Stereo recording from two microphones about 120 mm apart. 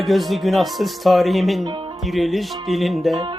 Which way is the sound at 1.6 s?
40° right (ahead or behind).